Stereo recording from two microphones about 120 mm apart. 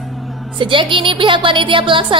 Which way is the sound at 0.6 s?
45° right (ahead or behind).